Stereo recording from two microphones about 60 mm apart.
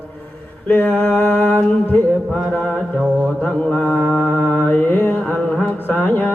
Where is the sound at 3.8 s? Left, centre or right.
Left.